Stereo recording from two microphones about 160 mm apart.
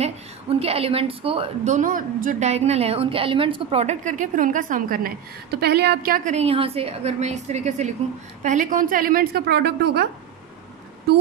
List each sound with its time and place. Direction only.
0.0 s a woman's voice: 40° right (ahead or behind); by 6.3 s 65° right (ahead or behind)
6.3 s a woman's voice: 40° right (ahead or behind); by 10.0 s 90° right